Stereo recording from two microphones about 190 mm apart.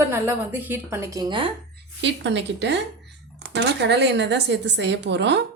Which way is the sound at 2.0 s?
65° right (ahead or behind).